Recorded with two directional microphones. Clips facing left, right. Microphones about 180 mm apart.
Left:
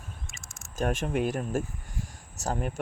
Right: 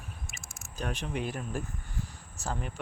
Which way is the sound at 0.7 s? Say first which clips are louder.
Left 7 dB; 45° left (ahead or behind).